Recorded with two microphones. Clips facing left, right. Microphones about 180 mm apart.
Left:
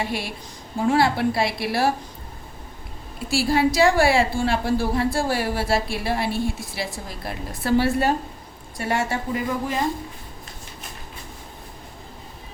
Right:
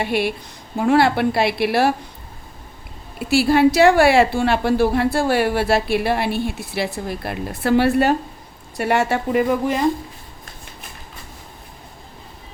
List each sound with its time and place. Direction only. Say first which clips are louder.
0.0 s a woman's voice: right 7 dB; 65° right (ahead or behind)
3.2 s a woman's voice: right 6 dB; 65° right (ahead or behind)